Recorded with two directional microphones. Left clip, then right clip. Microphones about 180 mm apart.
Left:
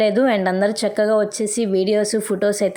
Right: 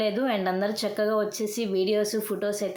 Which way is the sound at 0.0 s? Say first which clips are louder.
Left 9 dB; 40° left (ahead or behind).